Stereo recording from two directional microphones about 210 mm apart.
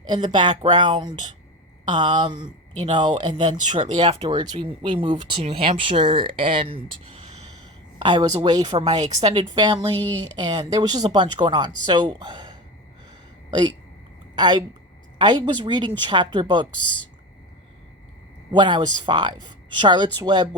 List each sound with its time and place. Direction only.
0.1 s speech: 20° right (ahead or behind)
14.3 s speech: 20° right (ahead or behind)
18.5 s speech: 20° right (ahead or behind)